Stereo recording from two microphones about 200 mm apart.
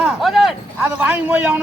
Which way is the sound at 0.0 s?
Centre (ahead or behind).